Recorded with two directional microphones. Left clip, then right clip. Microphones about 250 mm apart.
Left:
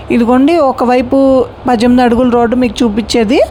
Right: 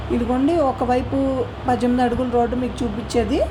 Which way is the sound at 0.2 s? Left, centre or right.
Left.